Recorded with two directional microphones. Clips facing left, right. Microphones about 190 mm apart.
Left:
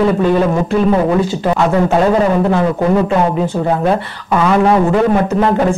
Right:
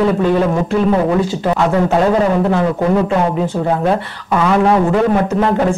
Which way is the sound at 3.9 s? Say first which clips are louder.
Left 1 dB; 20° left (ahead or behind).